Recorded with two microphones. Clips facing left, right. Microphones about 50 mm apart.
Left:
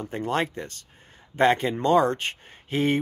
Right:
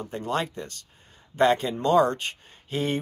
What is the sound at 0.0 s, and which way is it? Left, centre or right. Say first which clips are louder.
Speech: left 2 dB; left.